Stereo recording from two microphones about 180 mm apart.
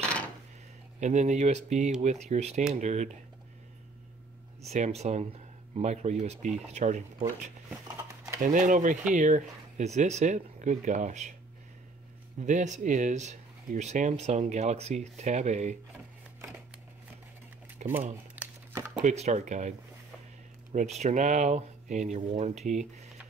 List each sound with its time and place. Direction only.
0.9 s speech: 40° right (ahead or behind)
4.6 s speech: 40° right (ahead or behind)
8.4 s speech: 45° right (ahead or behind)
12.4 s speech: 40° right (ahead or behind)
17.8 s a sound: 40° right (ahead or behind)
18.1 s crumpling: 10° right (ahead or behind)
18.9 s speech: 40° right (ahead or behind)
20.7 s speech: 40° right (ahead or behind)